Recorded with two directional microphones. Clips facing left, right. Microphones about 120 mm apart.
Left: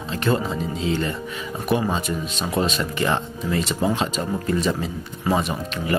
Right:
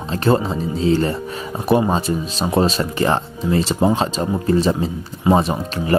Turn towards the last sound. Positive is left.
turn(degrees=-35)  # may be behind; listen again after turning